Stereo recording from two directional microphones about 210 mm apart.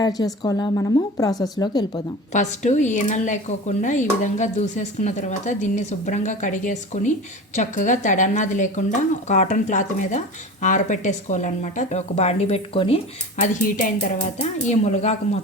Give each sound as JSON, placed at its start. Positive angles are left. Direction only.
{"t": 0.0, "sound": "a woman's voice", "side_deg": 20}
{"t": 2.3, "sound": "a woman's voice", "side_deg": 35}